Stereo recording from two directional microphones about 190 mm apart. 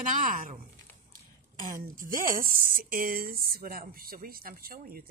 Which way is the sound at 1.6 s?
45° right (ahead or behind).